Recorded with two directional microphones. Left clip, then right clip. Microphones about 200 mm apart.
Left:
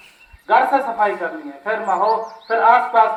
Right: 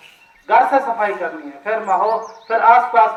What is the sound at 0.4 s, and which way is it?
A man's voice, 30° right (ahead or behind).